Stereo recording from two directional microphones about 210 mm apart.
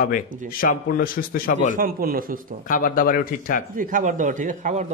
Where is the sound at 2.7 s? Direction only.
40° left (ahead or behind).